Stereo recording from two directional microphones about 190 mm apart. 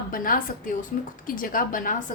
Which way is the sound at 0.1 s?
45° left (ahead or behind).